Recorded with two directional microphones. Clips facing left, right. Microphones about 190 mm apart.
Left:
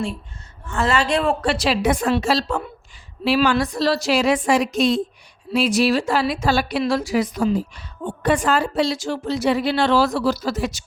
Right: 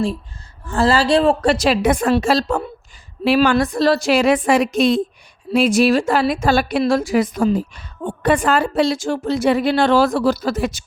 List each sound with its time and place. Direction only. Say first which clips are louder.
0.7 s a woman's voice: right 5 dB; 35° right (ahead or behind); by 10.8 s 55° right (ahead or behind)